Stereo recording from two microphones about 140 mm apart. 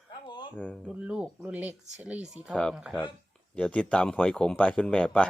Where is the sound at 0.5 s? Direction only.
10° left (ahead or behind).